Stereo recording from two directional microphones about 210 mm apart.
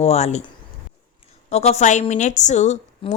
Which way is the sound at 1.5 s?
30° left (ahead or behind).